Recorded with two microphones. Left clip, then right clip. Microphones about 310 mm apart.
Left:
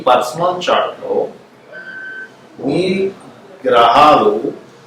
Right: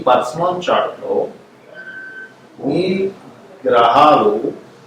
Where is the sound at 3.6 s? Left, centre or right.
Centre.